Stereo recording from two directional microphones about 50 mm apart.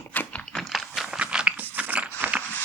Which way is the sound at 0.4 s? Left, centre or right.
Centre.